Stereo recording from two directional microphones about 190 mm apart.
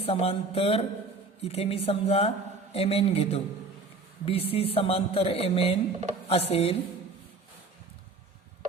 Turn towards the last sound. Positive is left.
turn(degrees=30)  # may be behind; listen again after turning